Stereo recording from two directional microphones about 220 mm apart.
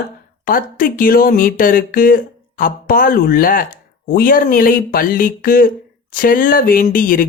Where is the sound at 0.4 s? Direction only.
40° left (ahead or behind).